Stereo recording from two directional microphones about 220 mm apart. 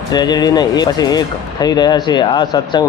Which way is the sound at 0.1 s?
20° left (ahead or behind).